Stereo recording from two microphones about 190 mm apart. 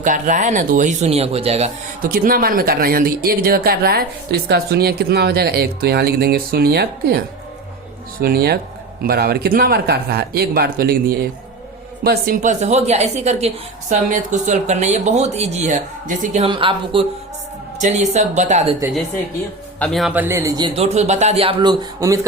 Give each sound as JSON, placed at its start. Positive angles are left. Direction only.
{"t": 0.0, "sound": "speech", "side_deg": -40}
{"t": 8.2, "sound": "speech", "side_deg": -55}
{"t": 12.0, "sound": "speech", "side_deg": -50}
{"t": 16.5, "sound": "speech", "side_deg": -25}
{"t": 17.7, "sound": "speech", "side_deg": -40}
{"t": 19.8, "sound": "speech", "side_deg": 0}